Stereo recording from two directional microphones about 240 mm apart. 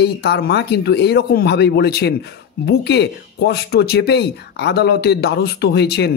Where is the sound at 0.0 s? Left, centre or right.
Left.